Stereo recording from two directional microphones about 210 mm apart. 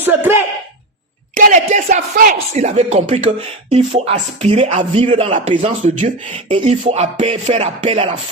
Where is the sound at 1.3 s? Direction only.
40° right (ahead or behind).